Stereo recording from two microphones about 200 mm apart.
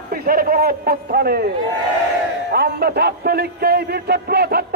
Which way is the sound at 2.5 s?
55° right (ahead or behind).